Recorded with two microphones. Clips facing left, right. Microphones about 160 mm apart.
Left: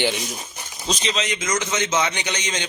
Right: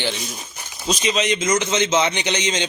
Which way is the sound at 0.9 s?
15° right (ahead or behind).